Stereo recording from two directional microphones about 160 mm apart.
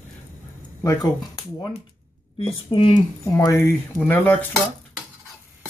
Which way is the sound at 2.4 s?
35° left (ahead or behind).